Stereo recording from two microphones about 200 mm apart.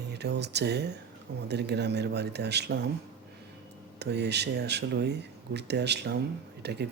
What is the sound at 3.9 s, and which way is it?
Speech, 55° right (ahead or behind).